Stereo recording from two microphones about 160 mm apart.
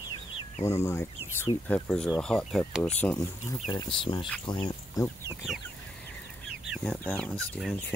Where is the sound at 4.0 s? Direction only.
30° left (ahead or behind).